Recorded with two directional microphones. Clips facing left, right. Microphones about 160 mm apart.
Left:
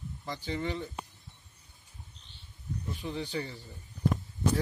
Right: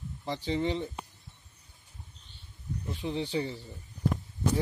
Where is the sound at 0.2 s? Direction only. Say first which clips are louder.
Right 5 dB; 30° right (ahead or behind).